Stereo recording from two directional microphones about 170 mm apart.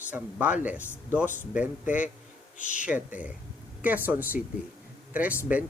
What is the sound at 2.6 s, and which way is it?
Speech, 50° left (ahead or behind).